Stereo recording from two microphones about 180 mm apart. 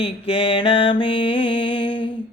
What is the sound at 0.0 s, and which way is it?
Mantra, 30° left (ahead or behind).